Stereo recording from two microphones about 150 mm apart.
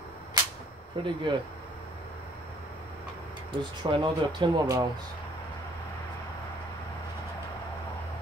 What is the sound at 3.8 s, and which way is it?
Speech, 30° right (ahead or behind).